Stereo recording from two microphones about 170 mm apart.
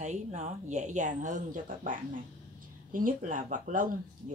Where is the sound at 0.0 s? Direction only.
45° right (ahead or behind).